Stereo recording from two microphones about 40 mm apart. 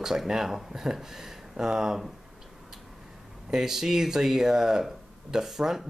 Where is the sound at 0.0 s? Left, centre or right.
Centre.